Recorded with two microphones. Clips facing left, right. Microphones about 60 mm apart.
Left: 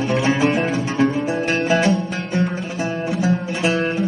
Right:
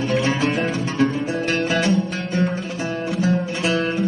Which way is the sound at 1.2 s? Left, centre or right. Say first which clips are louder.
Left 2 dB; centre.